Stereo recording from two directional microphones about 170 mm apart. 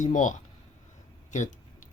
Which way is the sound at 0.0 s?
50° left (ahead or behind).